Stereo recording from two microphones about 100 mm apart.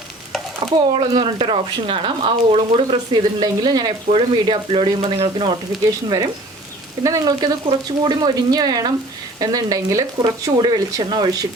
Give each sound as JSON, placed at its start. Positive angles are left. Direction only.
{"t": 0.8, "sound": "speech", "side_deg": -60}
{"t": 4.1, "sound": "speech", "side_deg": -55}
{"t": 6.1, "sound": "speech", "side_deg": -40}